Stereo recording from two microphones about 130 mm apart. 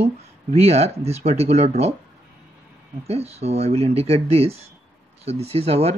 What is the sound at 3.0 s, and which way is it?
Speech, 50° right (ahead or behind).